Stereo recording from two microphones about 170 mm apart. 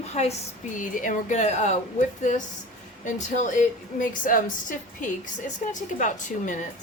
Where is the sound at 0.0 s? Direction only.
40° left (ahead or behind).